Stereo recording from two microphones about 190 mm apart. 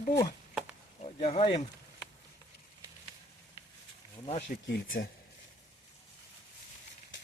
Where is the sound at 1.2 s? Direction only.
35° left (ahead or behind).